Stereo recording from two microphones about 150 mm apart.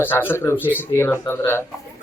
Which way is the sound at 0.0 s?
15° left (ahead or behind).